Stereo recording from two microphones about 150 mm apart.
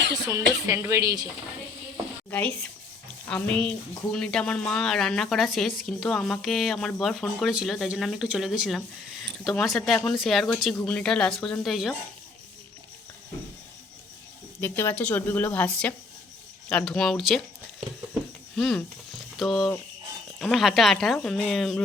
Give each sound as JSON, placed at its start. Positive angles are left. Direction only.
{"t": 0.3, "sound": "speech", "side_deg": -20}
{"t": 3.2, "sound": "speech", "side_deg": 10}
{"t": 14.6, "sound": "speech", "side_deg": 15}
{"t": 18.1, "sound": "a sound", "side_deg": 0}
{"t": 20.4, "sound": "speech", "side_deg": 0}